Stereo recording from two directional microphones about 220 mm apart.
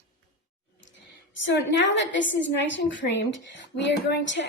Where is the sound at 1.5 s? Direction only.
55° left (ahead or behind).